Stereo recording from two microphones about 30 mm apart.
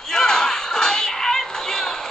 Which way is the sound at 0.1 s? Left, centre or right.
Left.